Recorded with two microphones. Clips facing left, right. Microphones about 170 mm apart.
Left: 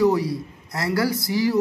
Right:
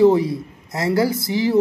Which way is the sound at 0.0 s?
25° right (ahead or behind).